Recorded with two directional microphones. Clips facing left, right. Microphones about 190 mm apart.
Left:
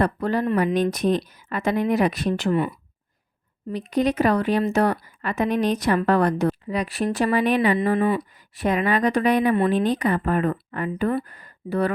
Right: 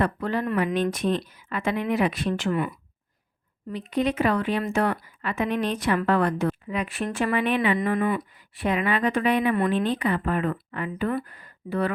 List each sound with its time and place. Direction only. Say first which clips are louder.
0.0 s speech: left 3 dB; 40° left (ahead or behind)
3.7 s speech: left 3 dB; 40° left (ahead or behind)
7.8 s speech: left 3 dB; 30° left (ahead or behind)
8.5 s speech: left 3 dB; 40° left (ahead or behind)